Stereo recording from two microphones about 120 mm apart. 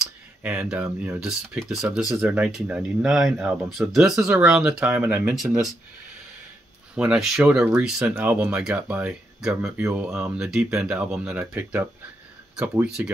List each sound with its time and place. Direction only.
0.0 s a sound: 10° right (ahead or behind)
0.8 s speech: 15° right (ahead or behind)
5.3 s speech: centre (ahead or behind)
7.0 s speech: 5° right (ahead or behind)